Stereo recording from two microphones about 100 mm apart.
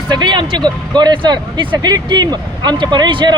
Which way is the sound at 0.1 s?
50° right (ahead or behind).